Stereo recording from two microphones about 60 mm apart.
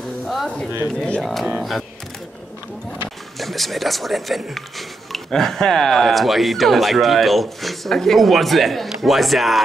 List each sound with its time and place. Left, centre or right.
0.9 s speech: centre
1.2 s speech: centre
3.3 s speech: centre